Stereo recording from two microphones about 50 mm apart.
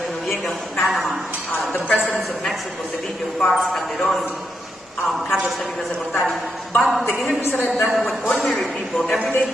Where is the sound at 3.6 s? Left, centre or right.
Centre.